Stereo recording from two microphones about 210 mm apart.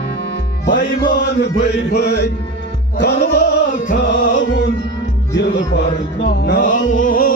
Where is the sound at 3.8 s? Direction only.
40° left (ahead or behind).